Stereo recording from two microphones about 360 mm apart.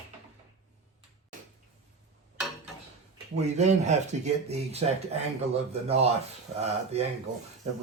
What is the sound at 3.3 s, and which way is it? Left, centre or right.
Speech, centre.